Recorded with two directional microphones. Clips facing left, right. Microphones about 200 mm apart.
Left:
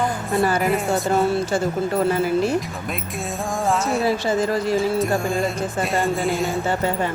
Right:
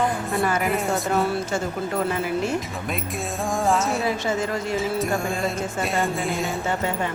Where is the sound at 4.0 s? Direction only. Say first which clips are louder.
Left 4 dB; 35° left (ahead or behind).